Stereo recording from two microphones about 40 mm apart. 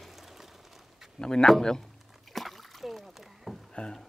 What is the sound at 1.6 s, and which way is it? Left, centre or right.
Speech, centre.